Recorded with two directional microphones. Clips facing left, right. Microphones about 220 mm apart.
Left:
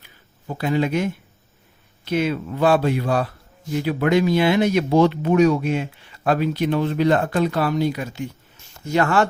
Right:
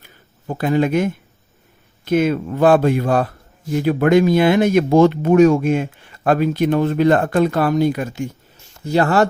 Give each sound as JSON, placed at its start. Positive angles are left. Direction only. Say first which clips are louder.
{"t": 0.0, "sound": "a sound", "louder": "right 5 dB", "side_deg": -50}
{"t": 2.0, "sound": "speech", "louder": "right 5 dB", "side_deg": -50}
{"t": 8.8, "sound": "speech", "louder": "right 3 dB", "side_deg": -35}